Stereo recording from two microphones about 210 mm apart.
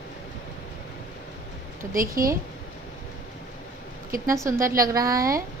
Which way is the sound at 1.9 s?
40° right (ahead or behind).